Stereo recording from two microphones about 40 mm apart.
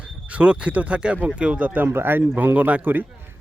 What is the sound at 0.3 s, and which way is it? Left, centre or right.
Speech, right.